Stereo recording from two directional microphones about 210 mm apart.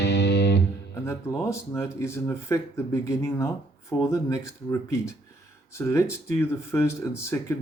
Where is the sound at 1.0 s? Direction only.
15° left (ahead or behind).